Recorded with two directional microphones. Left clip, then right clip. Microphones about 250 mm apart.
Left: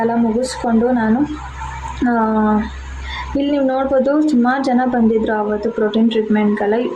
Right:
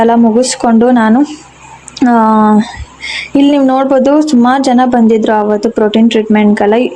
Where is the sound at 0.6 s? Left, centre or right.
Right.